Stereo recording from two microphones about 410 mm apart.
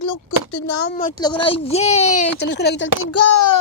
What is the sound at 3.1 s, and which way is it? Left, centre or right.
Speech, left.